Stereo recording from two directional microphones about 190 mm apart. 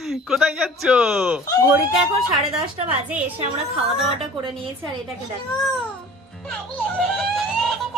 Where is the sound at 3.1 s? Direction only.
10° right (ahead or behind).